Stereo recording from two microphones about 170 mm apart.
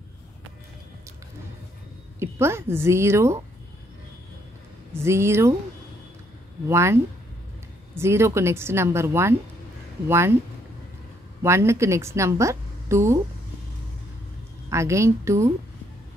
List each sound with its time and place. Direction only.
2.1 s a woman's voice: 15° right (ahead or behind)
4.9 s a woman's voice: 15° right (ahead or behind)
6.7 s a woman's voice: 15° right (ahead or behind)
8.0 s a woman's voice: 15° right (ahead or behind)
11.4 s a woman's voice: 15° right (ahead or behind)
14.7 s a woman's voice: 15° right (ahead or behind)